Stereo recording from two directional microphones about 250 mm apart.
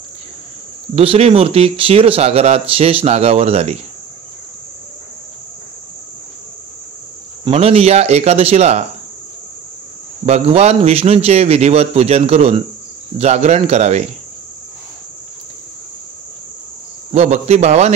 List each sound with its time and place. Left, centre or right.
0.9 s speech: right
7.4 s speech: right
10.2 s speech: right
17.1 s speech: right